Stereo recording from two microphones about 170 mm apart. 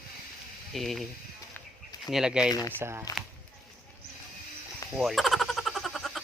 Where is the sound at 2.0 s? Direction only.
5° right (ahead or behind).